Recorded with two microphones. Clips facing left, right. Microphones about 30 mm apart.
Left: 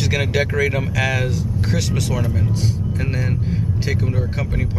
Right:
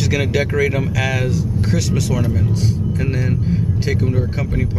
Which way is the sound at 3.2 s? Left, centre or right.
Centre.